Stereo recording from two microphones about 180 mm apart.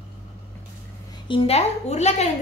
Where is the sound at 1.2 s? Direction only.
30° left (ahead or behind).